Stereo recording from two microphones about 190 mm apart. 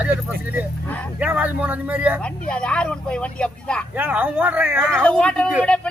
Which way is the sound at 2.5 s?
5° left (ahead or behind).